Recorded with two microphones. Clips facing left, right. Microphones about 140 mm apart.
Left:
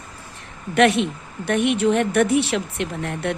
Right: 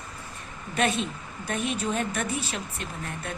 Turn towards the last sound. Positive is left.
turn(degrees=75)  # may be behind; listen again after turning